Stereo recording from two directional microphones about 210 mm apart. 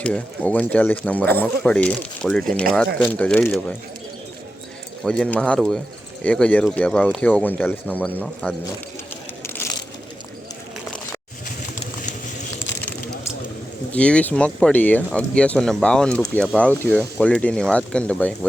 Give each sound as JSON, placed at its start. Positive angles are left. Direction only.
{"t": 0.0, "sound": "speech", "side_deg": 5}
{"t": 5.0, "sound": "speech", "side_deg": 5}
{"t": 9.4, "sound": "vehicle", "side_deg": 10}
{"t": 11.4, "sound": "pigeon", "side_deg": 40}
{"t": 13.9, "sound": "speech", "side_deg": 5}